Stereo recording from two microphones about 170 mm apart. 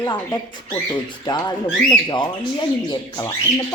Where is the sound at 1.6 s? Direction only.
5° left (ahead or behind).